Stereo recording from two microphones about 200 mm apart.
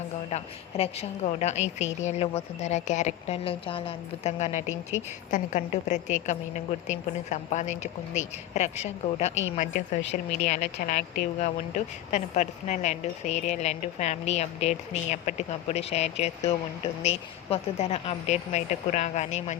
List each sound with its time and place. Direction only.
0.3 s a woman's voice: 30° left (ahead or behind)
4.7 s a woman's voice: 70° left (ahead or behind)
5.3 s a woman's voice: 35° left (ahead or behind)
17.5 s a woman's voice: 30° left (ahead or behind)